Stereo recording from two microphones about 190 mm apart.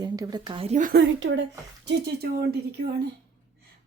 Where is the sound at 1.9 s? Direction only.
60° right (ahead or behind).